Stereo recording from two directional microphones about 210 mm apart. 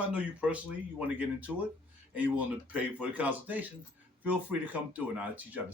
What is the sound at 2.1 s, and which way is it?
Speech, 5° right (ahead or behind).